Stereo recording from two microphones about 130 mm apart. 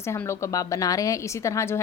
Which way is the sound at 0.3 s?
20° left (ahead or behind).